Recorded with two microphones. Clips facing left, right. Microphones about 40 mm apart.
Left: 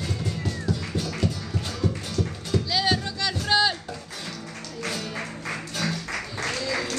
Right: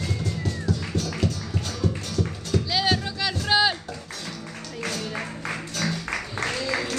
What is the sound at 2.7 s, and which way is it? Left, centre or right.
Music, centre.